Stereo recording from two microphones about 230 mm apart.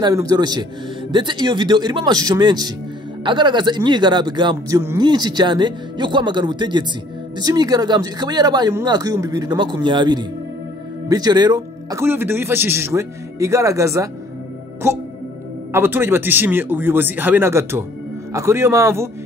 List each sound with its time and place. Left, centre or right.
0.0 s a man's voice: centre